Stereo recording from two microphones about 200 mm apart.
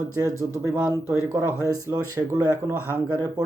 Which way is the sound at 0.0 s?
15° right (ahead or behind).